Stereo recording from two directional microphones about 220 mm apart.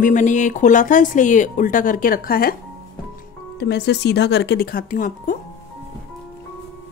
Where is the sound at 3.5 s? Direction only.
50° left (ahead or behind).